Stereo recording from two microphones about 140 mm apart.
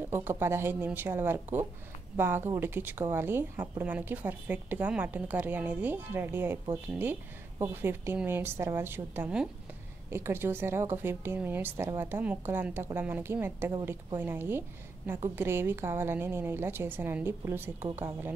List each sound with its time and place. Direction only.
0.1 s speech: 15° right (ahead or behind)